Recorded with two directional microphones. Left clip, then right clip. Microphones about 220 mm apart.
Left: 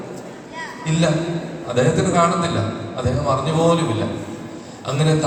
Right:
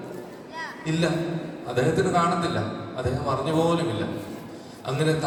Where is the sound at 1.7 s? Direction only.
20° right (ahead or behind).